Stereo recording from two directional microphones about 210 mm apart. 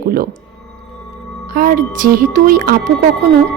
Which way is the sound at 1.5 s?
45° right (ahead or behind).